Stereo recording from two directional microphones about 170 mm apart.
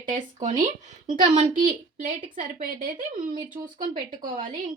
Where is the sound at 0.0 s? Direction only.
50° right (ahead or behind).